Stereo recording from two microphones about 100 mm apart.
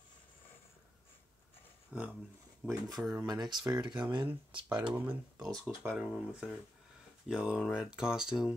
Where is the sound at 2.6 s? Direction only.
25° right (ahead or behind).